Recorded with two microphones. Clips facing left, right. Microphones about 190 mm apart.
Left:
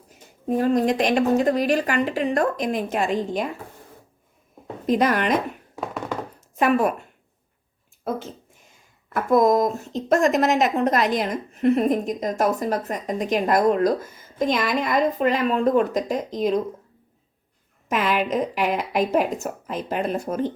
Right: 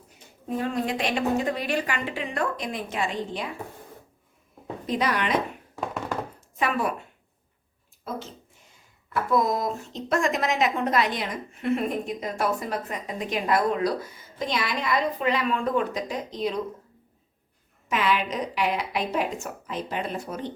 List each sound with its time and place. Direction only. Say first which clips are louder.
0.4 s speech: left 8 dB; 45° left (ahead or behind)
4.9 s speech: left 6 dB; 45° left (ahead or behind)
6.6 s speech: left 7 dB; 45° left (ahead or behind)
9.1 s speech: left 6 dB; 45° left (ahead or behind)
17.8 s speech: left 3 dB; 45° left (ahead or behind)